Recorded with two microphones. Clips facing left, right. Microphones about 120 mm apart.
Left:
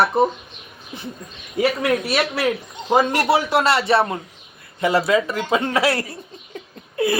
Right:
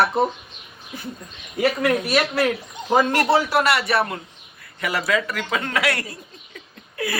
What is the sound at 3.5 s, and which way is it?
Speech, 25° left (ahead or behind).